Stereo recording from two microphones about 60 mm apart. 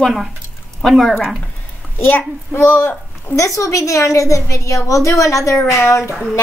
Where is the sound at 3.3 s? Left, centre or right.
Left.